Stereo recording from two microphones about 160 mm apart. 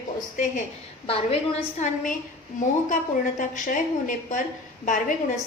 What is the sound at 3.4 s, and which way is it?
A woman's voice, 55° left (ahead or behind).